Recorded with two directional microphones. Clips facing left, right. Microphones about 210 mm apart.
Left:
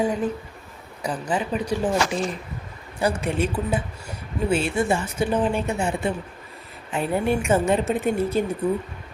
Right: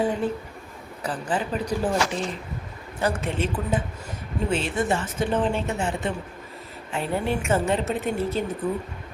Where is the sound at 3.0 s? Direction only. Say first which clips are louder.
Left 2 dB; 10° left (ahead or behind).